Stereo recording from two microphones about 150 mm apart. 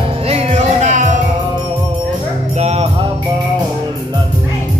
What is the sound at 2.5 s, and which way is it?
Music, 45° right (ahead or behind).